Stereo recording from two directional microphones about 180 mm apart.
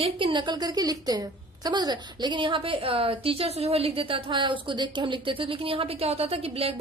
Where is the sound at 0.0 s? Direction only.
30° right (ahead or behind).